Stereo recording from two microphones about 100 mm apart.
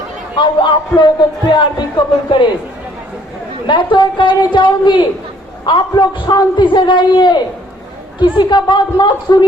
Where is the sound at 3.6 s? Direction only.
50° left (ahead or behind).